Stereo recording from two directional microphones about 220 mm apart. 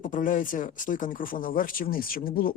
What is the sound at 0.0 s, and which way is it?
Speech, 35° left (ahead or behind).